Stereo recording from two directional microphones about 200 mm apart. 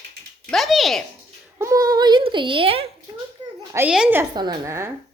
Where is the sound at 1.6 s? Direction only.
15° right (ahead or behind).